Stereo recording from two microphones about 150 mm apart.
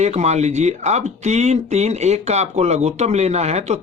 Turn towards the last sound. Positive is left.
turn(degrees=-45)  # may be behind; listen again after turning